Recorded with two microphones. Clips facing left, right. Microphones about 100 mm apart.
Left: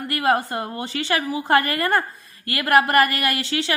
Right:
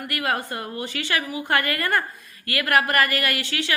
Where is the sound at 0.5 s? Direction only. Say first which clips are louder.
Left 3 dB; 30° left (ahead or behind).